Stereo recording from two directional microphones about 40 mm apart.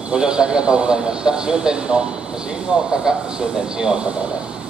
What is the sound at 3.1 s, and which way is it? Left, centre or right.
Speech, centre.